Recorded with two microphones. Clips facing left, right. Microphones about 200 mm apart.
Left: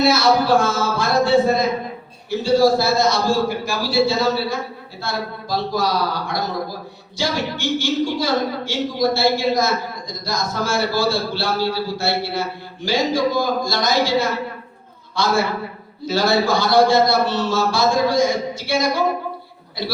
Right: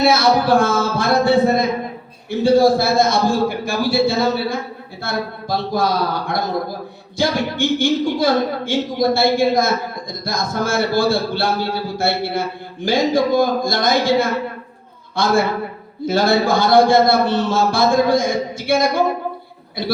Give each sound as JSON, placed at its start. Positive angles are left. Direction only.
{"t": 0.0, "sound": "a man's voice", "side_deg": -55}